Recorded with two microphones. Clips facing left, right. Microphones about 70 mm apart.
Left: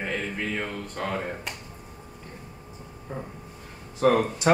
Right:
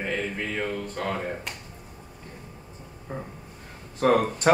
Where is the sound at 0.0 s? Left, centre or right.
Centre.